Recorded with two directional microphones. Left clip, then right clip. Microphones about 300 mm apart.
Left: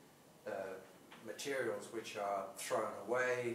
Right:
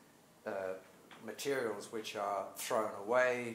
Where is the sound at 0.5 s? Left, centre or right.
Right.